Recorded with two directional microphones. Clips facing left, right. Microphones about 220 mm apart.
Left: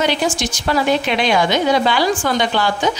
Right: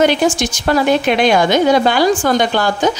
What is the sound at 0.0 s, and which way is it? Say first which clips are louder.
A woman's voice: right 5 dB; 50° right (ahead or behind).